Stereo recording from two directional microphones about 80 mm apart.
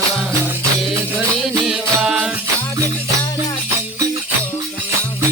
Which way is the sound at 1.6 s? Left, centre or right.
Centre.